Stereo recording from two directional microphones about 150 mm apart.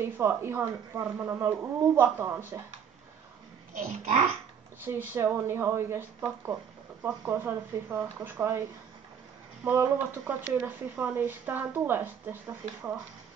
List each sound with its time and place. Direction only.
0.0 s speech: 15° right (ahead or behind)
4.8 s speech: 15° right (ahead or behind)
9.7 s speech: 10° right (ahead or behind)